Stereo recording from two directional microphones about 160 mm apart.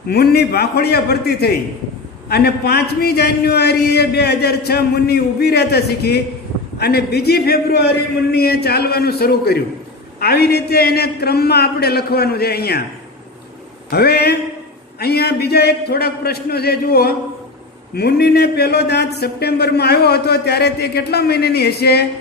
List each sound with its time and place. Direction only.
0.1 s a man's voice: 85° left
13.8 s a man's voice: 80° left
17.9 s speech: 85° left